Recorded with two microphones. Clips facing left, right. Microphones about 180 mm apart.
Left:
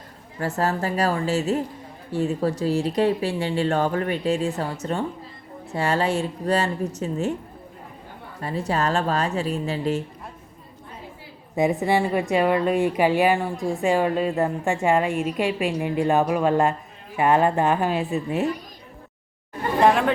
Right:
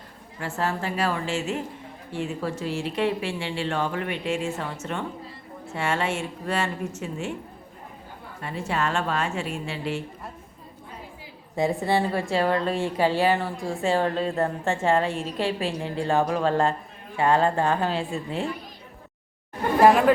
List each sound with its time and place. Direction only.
0.3 s speech: 40° left (ahead or behind)
8.4 s speech: 40° left (ahead or behind)
11.5 s a woman's voice: 20° left (ahead or behind)
19.8 s speech: 5° right (ahead or behind)